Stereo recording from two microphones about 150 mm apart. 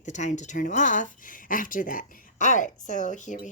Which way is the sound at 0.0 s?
55° left (ahead or behind).